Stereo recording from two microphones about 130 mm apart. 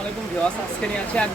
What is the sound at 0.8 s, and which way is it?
Speech, 10° left (ahead or behind).